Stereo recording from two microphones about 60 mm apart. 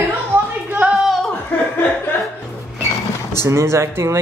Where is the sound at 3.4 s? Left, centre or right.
Right.